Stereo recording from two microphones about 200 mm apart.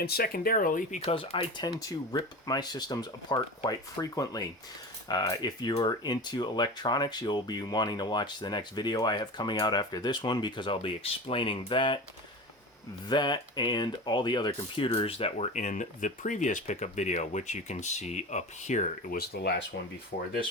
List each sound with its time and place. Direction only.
0.0 s speech: 50° left (ahead or behind); by 11.9 s 25° left (ahead or behind)
13.1 s speech: 20° left (ahead or behind)
19.3 s speech: 50° left (ahead or behind)